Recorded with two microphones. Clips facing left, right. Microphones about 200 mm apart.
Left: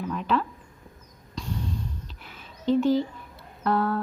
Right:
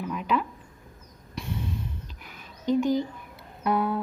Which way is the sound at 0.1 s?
10° right (ahead or behind).